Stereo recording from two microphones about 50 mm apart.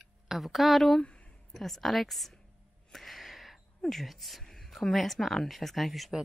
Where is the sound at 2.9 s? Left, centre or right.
Centre.